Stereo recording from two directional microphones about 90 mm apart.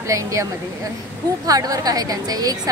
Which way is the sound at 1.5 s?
40° right (ahead or behind).